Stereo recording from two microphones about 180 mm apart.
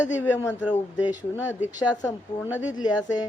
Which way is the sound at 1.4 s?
10° right (ahead or behind).